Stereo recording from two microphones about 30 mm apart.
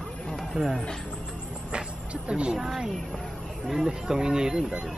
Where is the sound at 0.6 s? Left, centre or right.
Right.